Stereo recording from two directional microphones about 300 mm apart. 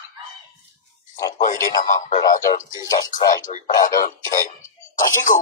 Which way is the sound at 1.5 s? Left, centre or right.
Centre.